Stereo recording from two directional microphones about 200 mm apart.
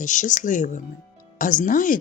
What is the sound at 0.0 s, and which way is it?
Speech, 40° left (ahead or behind).